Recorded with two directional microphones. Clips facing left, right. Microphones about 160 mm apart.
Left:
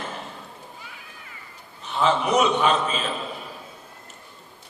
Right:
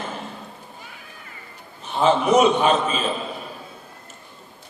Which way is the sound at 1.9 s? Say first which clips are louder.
Right 4 dB; 45° right (ahead or behind).